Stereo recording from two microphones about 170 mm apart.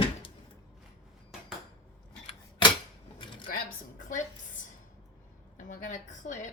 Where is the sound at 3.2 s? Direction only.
30° left (ahead or behind).